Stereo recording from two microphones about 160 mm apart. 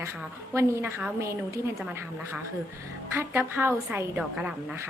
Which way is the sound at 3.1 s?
15° right (ahead or behind).